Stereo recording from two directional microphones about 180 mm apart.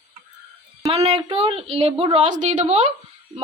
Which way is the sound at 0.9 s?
35° right (ahead or behind).